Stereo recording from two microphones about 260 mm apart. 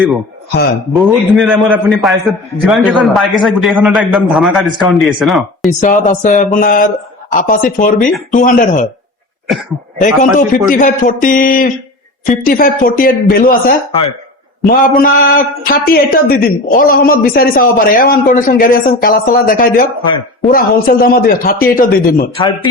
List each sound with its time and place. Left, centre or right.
0.9 s a man's voice: centre
5.8 s speech: left
10.0 s speech: left